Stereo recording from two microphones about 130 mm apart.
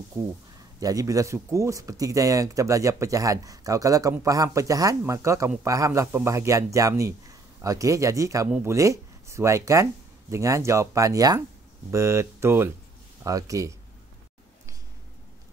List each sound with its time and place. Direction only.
0.6 s a man's voice: 25° right (ahead or behind)